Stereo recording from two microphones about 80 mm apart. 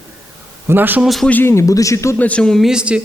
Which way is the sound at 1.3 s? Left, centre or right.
Left.